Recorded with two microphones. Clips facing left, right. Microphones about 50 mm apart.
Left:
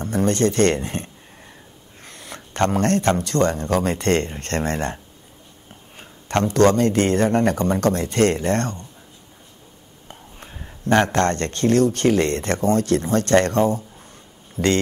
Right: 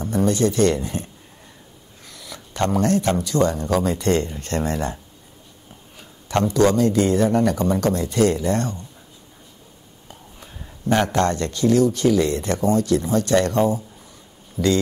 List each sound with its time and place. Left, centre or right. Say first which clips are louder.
0.0 s speech: even; left
10.0 s whispering: left 2 dB; left
10.9 s speech: left 1 dB; left
14.6 s speech: even; left